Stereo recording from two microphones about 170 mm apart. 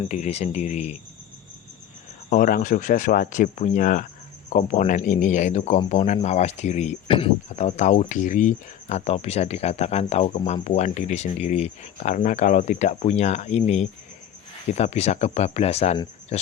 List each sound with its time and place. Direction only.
0.0 s speech: 40° left (ahead or behind)
2.3 s speech: 50° left (ahead or behind)
16.3 s a sound: 40° left (ahead or behind)